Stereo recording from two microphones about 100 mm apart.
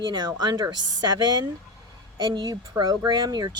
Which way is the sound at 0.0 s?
45° right (ahead or behind).